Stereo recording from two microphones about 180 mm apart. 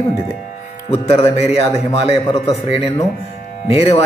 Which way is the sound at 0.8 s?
35° left (ahead or behind).